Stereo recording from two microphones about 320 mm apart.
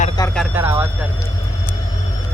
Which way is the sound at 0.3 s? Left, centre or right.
Centre.